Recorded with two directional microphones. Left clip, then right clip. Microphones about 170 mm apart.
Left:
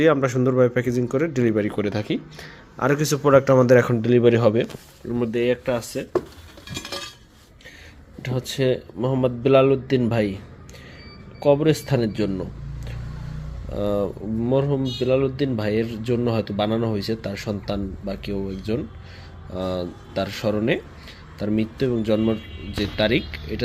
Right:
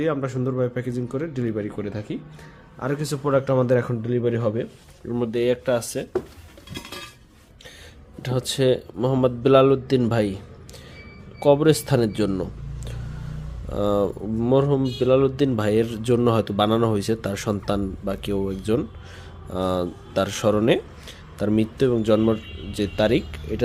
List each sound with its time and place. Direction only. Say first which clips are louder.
0.0 s speech: left 6 dB; 20° left (ahead or behind)
5.1 s speech: even; 10° right (ahead or behind)
8.2 s speech: right 2 dB; 15° right (ahead or behind)